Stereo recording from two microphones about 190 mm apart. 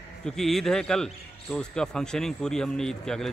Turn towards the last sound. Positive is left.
turn(degrees=5)  # may be behind; listen again after turning